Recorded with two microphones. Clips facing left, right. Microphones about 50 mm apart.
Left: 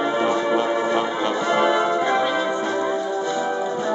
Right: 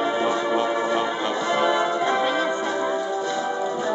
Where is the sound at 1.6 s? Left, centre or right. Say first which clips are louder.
Left 2 dB; centre.